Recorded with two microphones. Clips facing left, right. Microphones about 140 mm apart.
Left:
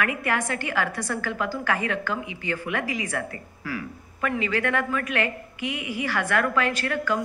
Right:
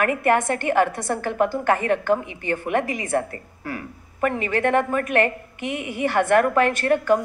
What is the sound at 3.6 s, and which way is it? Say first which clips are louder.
A woman's voice: even; 50° right (ahead or behind).